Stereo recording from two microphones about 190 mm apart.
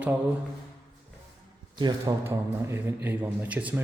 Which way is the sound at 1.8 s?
20° right (ahead or behind).